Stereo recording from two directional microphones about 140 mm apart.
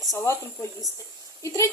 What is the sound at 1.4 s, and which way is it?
Speech, 20° left (ahead or behind).